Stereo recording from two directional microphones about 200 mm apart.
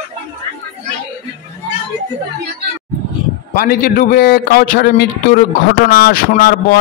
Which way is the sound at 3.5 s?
45° left (ahead or behind).